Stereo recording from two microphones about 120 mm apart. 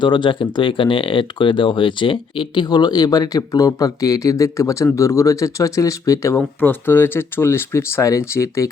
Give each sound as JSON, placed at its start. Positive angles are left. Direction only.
{"t": 0.0, "sound": "speech", "side_deg": 40}
{"t": 6.6, "sound": "speech", "side_deg": 15}